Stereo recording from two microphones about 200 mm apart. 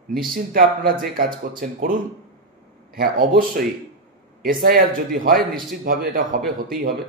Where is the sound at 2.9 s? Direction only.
45° right (ahead or behind).